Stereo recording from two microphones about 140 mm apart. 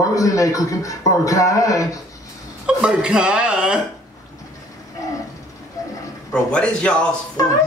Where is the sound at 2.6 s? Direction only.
5° right (ahead or behind).